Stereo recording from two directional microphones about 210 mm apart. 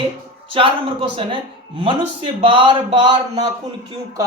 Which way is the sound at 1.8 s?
25° right (ahead or behind).